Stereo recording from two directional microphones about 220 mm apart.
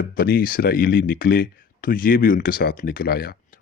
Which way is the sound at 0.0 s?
45° left (ahead or behind).